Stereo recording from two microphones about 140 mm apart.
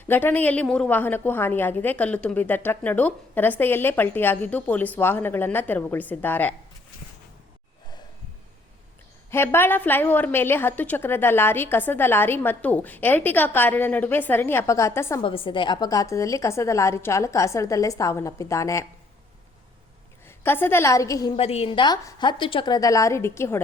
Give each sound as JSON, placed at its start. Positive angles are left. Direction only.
{"t": 0.1, "sound": "a woman's voice", "side_deg": 15}
{"t": 9.3, "sound": "a woman's voice", "side_deg": 15}
{"t": 15.2, "sound": "a woman's voice", "side_deg": 40}
{"t": 20.2, "sound": "a woman's voice", "side_deg": 15}
{"t": 21.3, "sound": "a woman's voice", "side_deg": 45}